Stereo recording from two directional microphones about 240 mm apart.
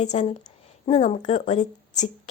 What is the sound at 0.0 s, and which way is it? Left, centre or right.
A woman's voice, left.